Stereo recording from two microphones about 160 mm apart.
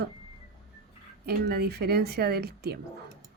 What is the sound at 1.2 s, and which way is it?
Speech, 80° right.